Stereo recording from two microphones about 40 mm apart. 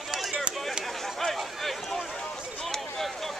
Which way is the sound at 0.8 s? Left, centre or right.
Centre.